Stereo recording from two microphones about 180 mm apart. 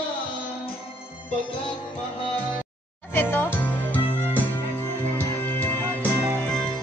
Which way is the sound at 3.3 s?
10° left (ahead or behind).